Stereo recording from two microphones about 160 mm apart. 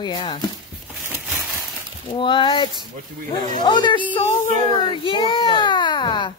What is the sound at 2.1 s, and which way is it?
Speech, 30° left (ahead or behind).